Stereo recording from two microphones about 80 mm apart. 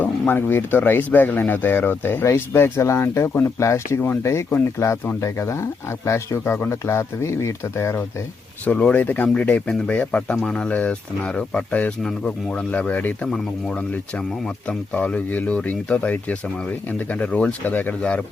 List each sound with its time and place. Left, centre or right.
0.0 s speech: left
8.6 s speech: centre
13.2 s speech: centre